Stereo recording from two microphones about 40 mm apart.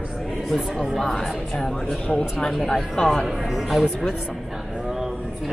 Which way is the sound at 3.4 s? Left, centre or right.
Centre.